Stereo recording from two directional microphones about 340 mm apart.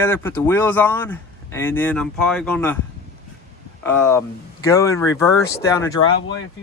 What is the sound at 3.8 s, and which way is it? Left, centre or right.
Speech, centre.